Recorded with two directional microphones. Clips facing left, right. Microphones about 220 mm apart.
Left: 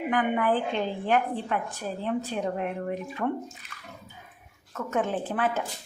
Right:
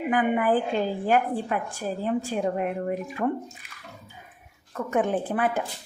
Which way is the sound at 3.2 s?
20° right (ahead or behind).